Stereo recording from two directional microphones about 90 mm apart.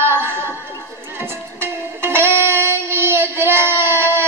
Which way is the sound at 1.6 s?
25° right (ahead or behind).